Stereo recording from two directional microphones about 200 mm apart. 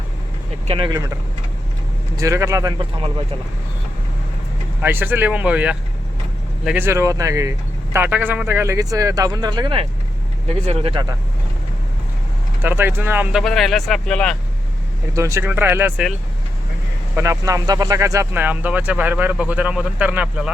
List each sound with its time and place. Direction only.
0.7 s speech: 25° right (ahead or behind)
2.1 s speech: 15° right (ahead or behind)
4.8 s speech: 10° right (ahead or behind); by 11.0 s 30° right (ahead or behind)
12.6 s speech: 10° right (ahead or behind)
13.4 s speech: centre (ahead or behind)
15.1 s speech: 15° right (ahead or behind)
17.2 s speech: 15° right (ahead or behind)